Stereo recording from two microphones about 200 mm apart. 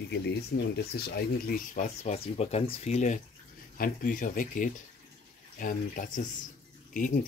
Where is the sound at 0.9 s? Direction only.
50° left (ahead or behind).